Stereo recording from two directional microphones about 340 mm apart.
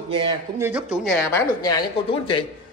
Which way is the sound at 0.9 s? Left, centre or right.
Centre.